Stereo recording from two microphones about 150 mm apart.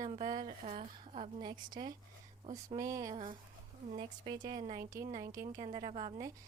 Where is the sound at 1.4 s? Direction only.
30° right (ahead or behind).